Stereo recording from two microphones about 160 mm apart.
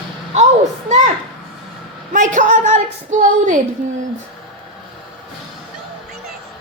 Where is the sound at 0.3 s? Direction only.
45° right (ahead or behind).